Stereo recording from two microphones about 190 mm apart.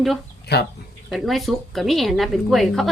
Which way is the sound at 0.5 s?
60° left (ahead or behind).